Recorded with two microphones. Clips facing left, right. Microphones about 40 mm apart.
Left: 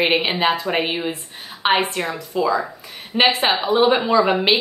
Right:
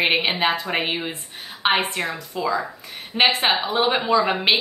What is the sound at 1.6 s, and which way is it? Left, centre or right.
A woman's voice, centre.